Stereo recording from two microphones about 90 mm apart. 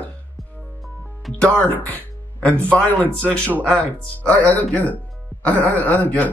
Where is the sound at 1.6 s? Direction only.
15° left (ahead or behind).